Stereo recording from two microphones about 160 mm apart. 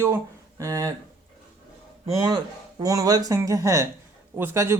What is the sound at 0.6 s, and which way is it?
Speech, 20° right (ahead or behind).